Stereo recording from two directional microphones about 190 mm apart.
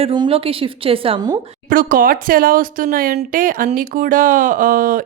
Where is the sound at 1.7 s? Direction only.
45° right (ahead or behind).